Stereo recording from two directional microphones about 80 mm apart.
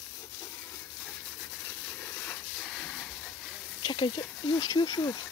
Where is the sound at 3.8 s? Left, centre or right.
Left.